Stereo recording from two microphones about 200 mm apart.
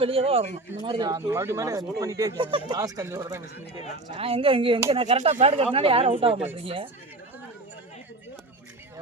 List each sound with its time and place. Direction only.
0.0 s speech: 30° right (ahead or behind)
0.9 s speech: 20° right (ahead or behind)
4.1 s speech: 30° right (ahead or behind)